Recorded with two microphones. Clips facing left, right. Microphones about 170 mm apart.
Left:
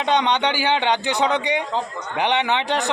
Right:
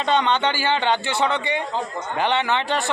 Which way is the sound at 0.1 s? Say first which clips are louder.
Left 1 dB; 15° left (ahead or behind).